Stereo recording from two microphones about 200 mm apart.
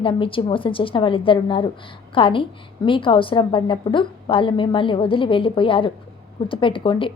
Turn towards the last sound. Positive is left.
turn(degrees=25)  # may be behind; listen again after turning